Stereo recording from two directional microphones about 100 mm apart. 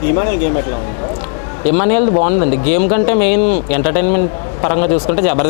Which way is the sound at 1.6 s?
15° left (ahead or behind).